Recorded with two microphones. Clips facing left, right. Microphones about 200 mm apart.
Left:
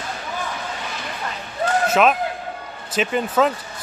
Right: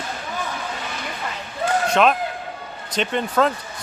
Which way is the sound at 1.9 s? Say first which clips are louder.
Even; 5° left (ahead or behind).